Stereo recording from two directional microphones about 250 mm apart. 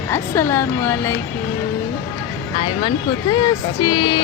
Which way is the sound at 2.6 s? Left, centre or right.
Centre.